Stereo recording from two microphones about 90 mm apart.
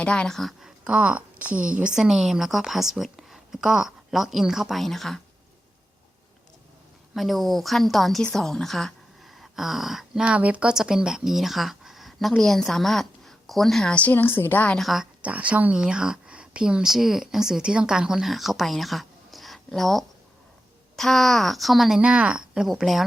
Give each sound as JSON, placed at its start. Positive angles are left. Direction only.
{"t": 0.0, "sound": "speech", "side_deg": 10}
{"t": 0.9, "sound": "speech", "side_deg": -15}
{"t": 7.1, "sound": "speech", "side_deg": 0}
{"t": 10.2, "sound": "speech", "side_deg": -15}
{"t": 14.8, "sound": "speech", "side_deg": 0}
{"t": 15.2, "sound": "speech", "side_deg": -15}